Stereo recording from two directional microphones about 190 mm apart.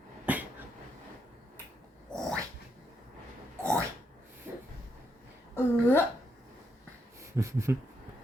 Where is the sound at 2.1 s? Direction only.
Centre (ahead or behind).